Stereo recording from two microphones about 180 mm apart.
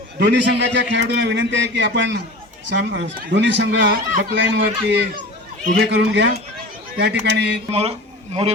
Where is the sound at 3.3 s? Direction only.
80° right.